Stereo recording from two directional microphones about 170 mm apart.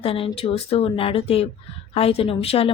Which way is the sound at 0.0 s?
35° left (ahead or behind).